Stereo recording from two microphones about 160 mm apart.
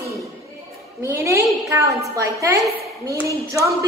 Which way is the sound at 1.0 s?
20° right (ahead or behind).